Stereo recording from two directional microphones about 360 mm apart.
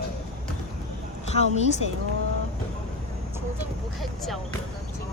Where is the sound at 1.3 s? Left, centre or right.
Centre.